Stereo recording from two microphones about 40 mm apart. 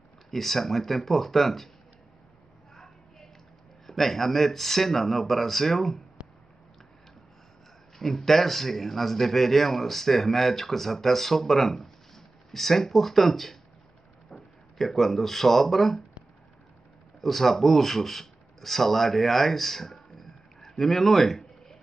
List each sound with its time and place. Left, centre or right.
0.3 s a man's voice: centre
2.7 s a sound: centre
3.8 s a man's voice: centre
6.2 s a sound: right
8.0 s a man's voice: centre
17.2 s speech: centre